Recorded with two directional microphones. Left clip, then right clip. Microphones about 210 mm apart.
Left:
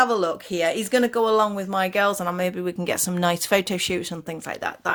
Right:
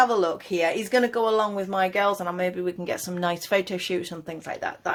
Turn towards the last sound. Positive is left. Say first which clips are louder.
# left 2 dB
turn(degrees=30)  # may be behind; listen again after turning